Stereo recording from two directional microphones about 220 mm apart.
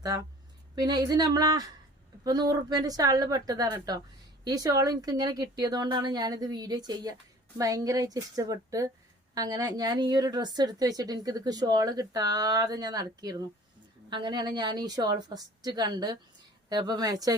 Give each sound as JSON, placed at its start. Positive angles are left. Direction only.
{"t": 0.8, "sound": "a woman's voice", "side_deg": -15}